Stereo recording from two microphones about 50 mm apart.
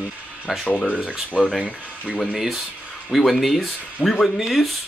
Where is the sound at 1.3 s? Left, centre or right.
Centre.